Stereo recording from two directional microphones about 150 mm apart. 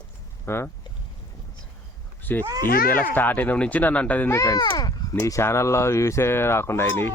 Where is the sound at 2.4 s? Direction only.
25° right (ahead or behind).